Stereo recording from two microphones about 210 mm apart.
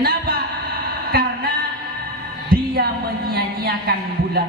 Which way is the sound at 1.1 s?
45° right (ahead or behind).